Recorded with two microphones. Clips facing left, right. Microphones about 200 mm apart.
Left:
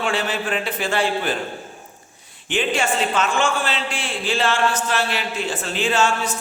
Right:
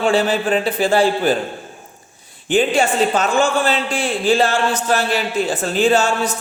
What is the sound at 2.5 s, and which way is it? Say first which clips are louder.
A man's voice: right 6 dB; 35° right (ahead or behind).